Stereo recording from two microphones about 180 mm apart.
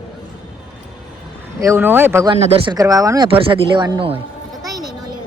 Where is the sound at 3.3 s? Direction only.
30° right (ahead or behind).